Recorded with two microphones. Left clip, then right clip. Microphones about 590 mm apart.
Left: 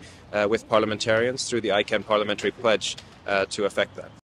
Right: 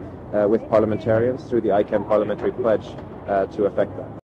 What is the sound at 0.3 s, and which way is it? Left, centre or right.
Speech, left.